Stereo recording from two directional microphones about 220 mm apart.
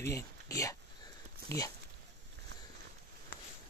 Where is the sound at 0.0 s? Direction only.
15° left (ahead or behind).